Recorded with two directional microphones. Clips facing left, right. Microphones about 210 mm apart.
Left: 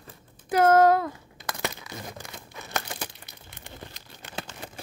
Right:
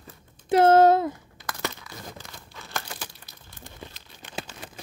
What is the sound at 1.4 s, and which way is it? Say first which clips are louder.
Crumpling: even; 20° left (ahead or behind).